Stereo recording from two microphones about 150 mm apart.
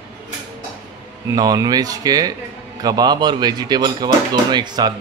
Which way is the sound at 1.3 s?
25° right (ahead or behind).